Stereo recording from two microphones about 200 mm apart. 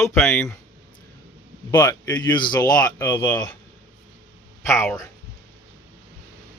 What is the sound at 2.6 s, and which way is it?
Speech, 5° left (ahead or behind).